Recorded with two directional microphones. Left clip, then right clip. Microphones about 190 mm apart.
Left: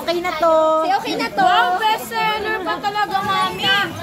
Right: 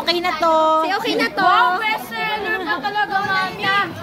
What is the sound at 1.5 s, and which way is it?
Speech, 20° right (ahead or behind).